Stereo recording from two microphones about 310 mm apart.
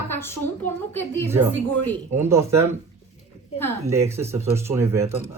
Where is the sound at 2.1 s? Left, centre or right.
Centre.